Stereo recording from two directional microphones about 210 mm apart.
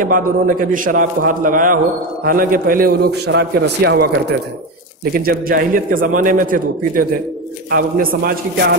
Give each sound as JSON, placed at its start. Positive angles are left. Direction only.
{"t": 0.0, "sound": "a man's voice", "side_deg": -40}